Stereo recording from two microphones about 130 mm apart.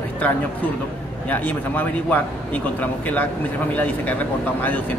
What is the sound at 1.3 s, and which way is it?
Speech, 15° left (ahead or behind).